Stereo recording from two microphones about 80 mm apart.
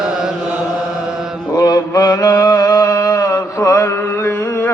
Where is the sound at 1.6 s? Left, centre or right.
Left.